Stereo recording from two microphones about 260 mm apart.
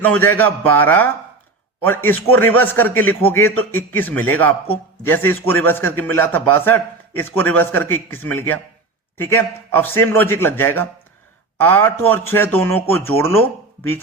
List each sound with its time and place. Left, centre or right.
0.0 s a man's voice: centre